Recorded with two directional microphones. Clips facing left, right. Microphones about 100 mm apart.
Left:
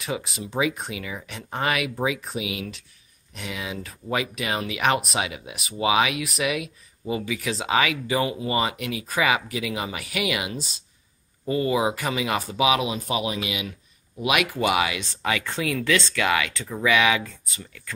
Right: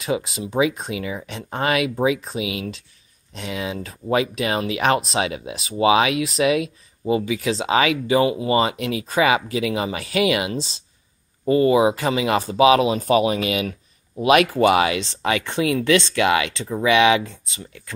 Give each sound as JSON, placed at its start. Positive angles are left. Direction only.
{"t": 0.0, "sound": "speech", "side_deg": -25}
{"t": 12.9, "sound": "speech", "side_deg": -45}
{"t": 14.2, "sound": "speech", "side_deg": -35}